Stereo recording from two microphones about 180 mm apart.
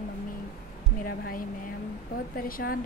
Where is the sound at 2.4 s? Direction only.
55° left (ahead or behind).